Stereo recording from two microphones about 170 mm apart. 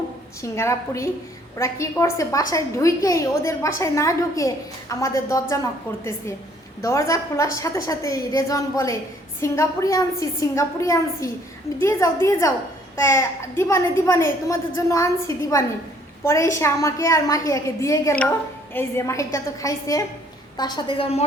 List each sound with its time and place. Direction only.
0.5 s a woman's voice: 15° left (ahead or behind)
6.8 s a woman's voice: 20° left (ahead or behind); by 21.2 s 35° left (ahead or behind)